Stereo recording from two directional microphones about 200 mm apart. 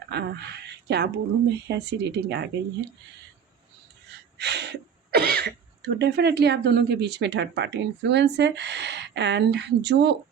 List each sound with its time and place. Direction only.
0.1 s speech: 55° right (ahead or behind)
4.4 s speech: 55° right (ahead or behind)